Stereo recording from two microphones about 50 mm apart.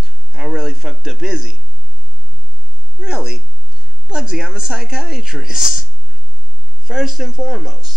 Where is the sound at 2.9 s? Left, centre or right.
Centre.